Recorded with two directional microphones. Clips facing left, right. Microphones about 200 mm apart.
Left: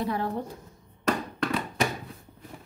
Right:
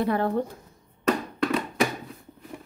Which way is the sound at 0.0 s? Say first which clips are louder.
Right 5 dB; 60° right (ahead or behind).